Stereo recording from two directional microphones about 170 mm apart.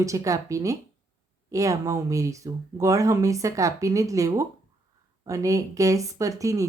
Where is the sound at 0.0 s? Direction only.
20° right (ahead or behind).